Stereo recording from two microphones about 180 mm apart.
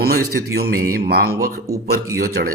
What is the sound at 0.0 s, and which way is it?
A man's voice, 60° right (ahead or behind).